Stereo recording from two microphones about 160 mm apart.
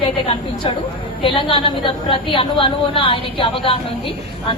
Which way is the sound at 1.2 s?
30° left (ahead or behind).